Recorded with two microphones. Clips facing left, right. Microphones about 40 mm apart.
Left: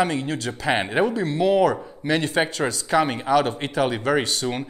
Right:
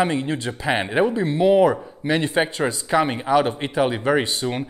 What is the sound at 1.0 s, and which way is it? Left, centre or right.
A man's voice, right.